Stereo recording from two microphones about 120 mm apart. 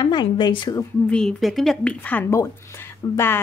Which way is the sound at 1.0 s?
5° left (ahead or behind).